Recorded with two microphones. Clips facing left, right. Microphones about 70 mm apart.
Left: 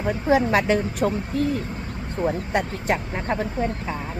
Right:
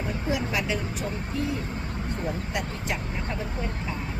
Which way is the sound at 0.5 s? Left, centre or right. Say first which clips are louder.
Left 8 dB; left.